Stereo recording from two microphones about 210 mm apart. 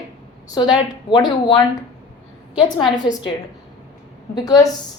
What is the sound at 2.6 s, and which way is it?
Speech, 20° left (ahead or behind).